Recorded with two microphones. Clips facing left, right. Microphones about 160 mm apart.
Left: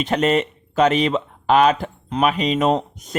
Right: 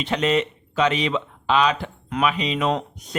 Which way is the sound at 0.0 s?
45° left (ahead or behind).